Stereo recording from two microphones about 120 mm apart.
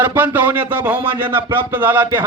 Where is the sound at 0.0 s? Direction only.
15° right (ahead or behind).